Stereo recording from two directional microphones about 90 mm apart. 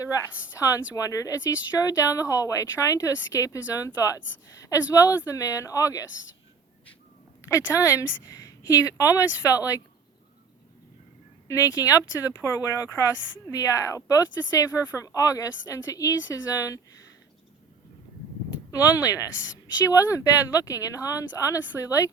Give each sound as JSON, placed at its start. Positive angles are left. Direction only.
{"t": 0.9, "sound": "speech", "side_deg": 40}
{"t": 7.4, "sound": "speech", "side_deg": 35}
{"t": 11.4, "sound": "speech", "side_deg": 35}
{"t": 18.7, "sound": "speech", "side_deg": 40}